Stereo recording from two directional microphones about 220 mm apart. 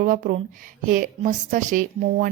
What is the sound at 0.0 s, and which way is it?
A woman's voice, 35° right (ahead or behind).